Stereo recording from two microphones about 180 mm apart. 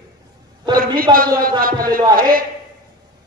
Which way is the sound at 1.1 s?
50° right (ahead or behind).